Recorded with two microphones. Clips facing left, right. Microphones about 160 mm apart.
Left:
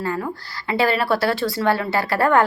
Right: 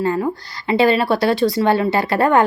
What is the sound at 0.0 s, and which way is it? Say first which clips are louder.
A woman's voice: right 6 dB; 20° right (ahead or behind).